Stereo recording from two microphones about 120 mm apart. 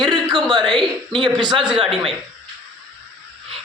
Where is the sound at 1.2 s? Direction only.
40° right (ahead or behind).